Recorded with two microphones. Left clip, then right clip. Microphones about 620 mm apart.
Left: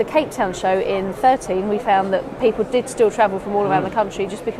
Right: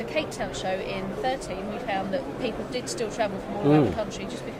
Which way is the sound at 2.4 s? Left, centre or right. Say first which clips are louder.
Left 12 dB; left.